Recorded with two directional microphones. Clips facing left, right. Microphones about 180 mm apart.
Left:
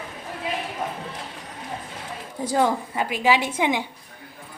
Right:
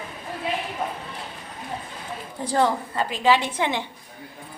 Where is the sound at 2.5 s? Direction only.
10° left (ahead or behind).